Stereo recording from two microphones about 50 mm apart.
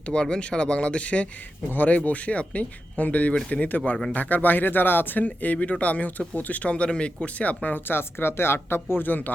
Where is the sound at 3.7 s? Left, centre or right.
Left.